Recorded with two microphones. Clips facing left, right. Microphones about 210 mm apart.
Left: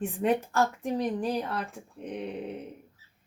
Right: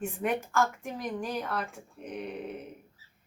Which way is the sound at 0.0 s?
35° left (ahead or behind).